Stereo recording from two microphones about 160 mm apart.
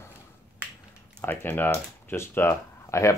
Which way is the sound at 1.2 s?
10° left (ahead or behind).